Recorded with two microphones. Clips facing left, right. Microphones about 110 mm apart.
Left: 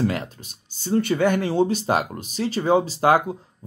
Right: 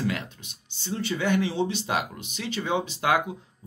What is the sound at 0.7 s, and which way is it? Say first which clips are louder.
Speech: left 9 dB; 45° left (ahead or behind).